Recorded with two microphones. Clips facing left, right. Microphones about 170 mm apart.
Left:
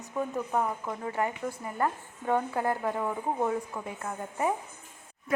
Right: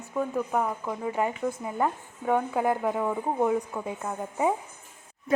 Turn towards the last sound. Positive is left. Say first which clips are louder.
# right 4 dB
turn(degrees=-15)  # may be behind; listen again after turning